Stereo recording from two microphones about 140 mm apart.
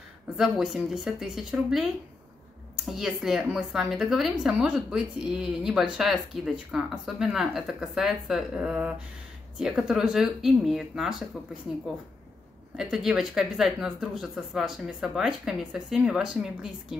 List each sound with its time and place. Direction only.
0.4 s speech: 5° right (ahead or behind)
2.9 s speech: 5° right (ahead or behind)
12.7 s speech: 5° right (ahead or behind)